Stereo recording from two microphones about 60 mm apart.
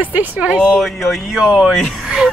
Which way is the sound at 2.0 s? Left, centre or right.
Centre.